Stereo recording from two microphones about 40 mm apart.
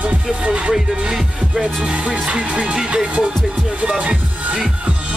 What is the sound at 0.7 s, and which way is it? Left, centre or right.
Music, centre.